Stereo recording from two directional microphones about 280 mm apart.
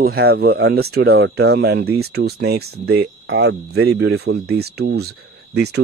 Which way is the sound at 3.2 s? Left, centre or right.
Right.